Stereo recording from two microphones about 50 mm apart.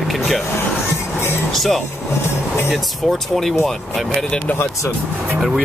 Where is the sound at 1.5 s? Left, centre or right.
Centre.